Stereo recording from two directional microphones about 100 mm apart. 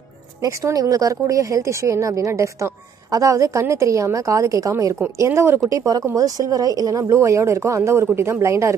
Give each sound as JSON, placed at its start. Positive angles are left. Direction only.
{"t": 0.4, "sound": "a woman's voice", "side_deg": -35}